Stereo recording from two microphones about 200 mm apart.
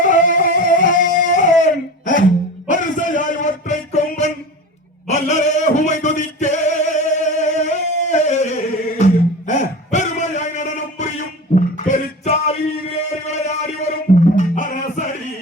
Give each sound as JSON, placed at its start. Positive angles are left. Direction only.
{"t": 0.0, "sound": "music", "side_deg": 40}
{"t": 2.6, "sound": "a sound", "side_deg": 40}
{"t": 13.2, "sound": "music", "side_deg": 35}